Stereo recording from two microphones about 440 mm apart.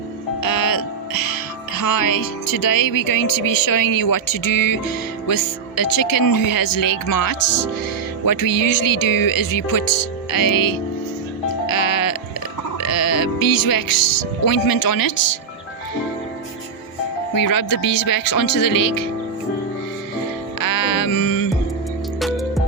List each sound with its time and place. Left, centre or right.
0.4 s music: left
17.3 s music: left
20.6 s music: left
22.2 s music: centre